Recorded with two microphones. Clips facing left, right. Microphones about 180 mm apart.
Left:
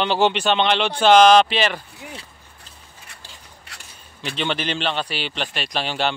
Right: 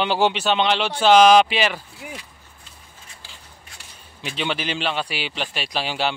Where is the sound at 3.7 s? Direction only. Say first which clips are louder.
Left 4 dB; 75° left (ahead or behind).